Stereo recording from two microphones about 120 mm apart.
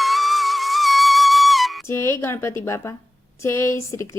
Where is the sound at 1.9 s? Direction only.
25° left (ahead or behind).